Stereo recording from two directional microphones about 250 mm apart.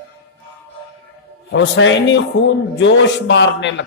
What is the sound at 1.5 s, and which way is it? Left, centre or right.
Mantra, left.